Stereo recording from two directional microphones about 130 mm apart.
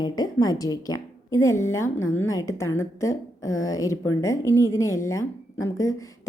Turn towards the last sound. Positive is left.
turn(degrees=25)  # may be behind; listen again after turning